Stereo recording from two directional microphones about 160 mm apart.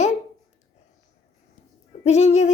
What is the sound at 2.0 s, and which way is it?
Speech, 45° left (ahead or behind).